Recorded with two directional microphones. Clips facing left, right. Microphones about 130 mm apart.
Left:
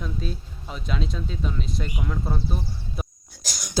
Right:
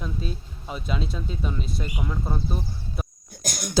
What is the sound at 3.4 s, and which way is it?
Throat clearing, 55° right (ahead or behind).